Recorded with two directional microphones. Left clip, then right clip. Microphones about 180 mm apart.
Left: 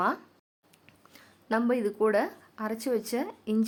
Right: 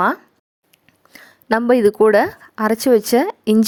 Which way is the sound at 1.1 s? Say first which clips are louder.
Right 11 dB; 45° right (ahead or behind).